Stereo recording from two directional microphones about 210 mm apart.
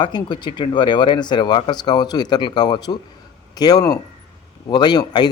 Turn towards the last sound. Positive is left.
turn(degrees=20)  # may be behind; listen again after turning